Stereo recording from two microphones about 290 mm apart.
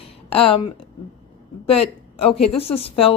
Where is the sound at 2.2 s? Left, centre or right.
Centre.